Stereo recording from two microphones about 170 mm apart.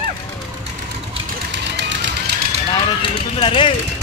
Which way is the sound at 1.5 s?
90° right.